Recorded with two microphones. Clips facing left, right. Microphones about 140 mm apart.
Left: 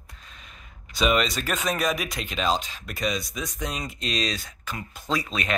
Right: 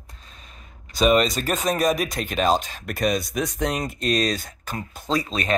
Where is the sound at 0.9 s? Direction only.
40° right (ahead or behind).